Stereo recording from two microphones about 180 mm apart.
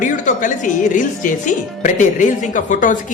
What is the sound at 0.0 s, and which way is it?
Speech, 45° left (ahead or behind).